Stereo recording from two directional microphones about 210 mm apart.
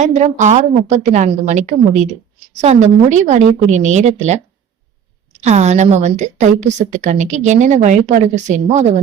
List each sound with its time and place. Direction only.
0.0 s a woman's voice: 35° right (ahead or behind)